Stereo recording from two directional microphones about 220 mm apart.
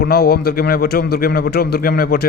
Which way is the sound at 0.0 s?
45° left (ahead or behind).